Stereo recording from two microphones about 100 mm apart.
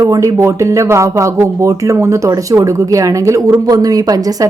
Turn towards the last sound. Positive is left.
turn(degrees=-40)  # may be behind; listen again after turning